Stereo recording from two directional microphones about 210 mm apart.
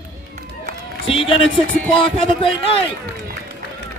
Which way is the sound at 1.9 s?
25° left (ahead or behind).